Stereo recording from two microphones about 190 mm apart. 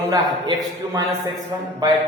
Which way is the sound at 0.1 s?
20° right (ahead or behind).